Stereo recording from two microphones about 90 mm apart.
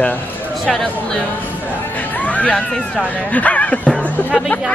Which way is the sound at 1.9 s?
20° left (ahead or behind).